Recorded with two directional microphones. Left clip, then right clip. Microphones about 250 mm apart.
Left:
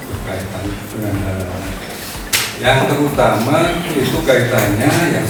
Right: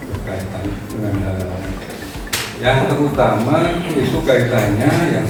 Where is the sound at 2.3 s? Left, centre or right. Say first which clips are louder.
Left 3 dB; centre.